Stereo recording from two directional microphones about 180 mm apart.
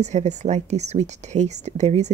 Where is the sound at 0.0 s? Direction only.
40° right (ahead or behind).